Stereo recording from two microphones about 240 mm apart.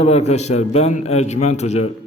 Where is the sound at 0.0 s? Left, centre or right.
Left.